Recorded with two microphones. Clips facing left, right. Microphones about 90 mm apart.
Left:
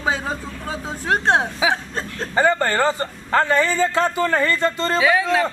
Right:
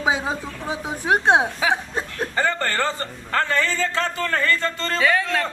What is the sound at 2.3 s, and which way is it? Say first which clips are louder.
A man's voice: left 6 dB; 15° left (ahead or behind).